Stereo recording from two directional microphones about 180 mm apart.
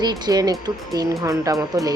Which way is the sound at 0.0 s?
25° right (ahead or behind).